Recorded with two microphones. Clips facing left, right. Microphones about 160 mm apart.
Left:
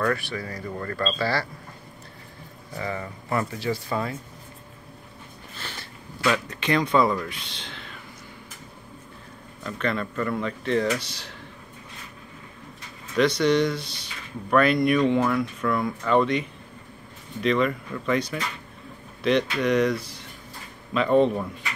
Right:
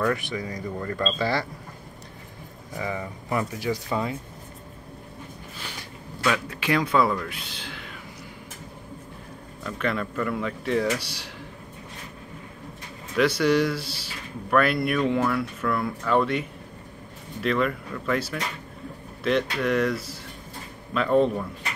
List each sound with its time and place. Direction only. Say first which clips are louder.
0.0 s speech: even; 20° right (ahead or behind)
2.7 s speech: even; 15° right (ahead or behind)
5.6 s a sound: left 1 dB; 15° right (ahead or behind)
6.2 s speech: left 1 dB; 5° right (ahead or behind)
9.6 s speech: even; 5° right (ahead or behind)
13.2 s speech: left 1 dB; 5° right (ahead or behind)